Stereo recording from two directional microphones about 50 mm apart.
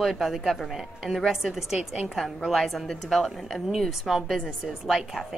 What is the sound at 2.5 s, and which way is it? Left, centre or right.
A woman's voice, centre.